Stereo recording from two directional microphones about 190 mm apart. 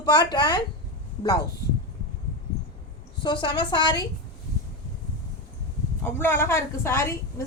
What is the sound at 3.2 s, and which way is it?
Speech, 25° left (ahead or behind).